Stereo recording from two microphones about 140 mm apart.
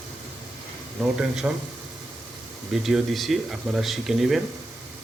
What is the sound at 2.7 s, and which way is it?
Speech, 5° right (ahead or behind).